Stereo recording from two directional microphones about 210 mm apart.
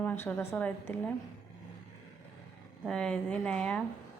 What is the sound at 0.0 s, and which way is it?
A woman's voice, 10° left (ahead or behind).